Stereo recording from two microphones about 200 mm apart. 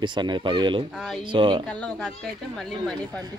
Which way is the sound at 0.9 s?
Centre (ahead or behind).